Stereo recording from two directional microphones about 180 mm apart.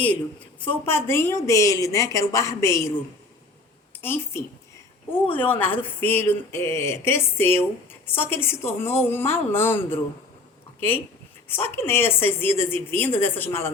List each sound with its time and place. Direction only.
0.9 s speech: 15° left (ahead or behind)
4.0 s speech: 10° left (ahead or behind)